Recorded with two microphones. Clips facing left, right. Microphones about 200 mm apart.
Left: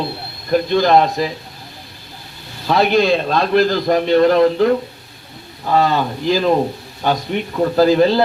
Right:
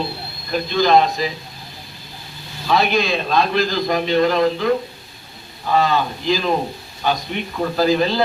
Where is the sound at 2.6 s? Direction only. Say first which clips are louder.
Left 4 dB; 60° left (ahead or behind).